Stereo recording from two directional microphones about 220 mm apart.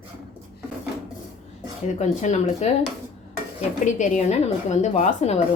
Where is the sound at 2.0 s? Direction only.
30° left (ahead or behind).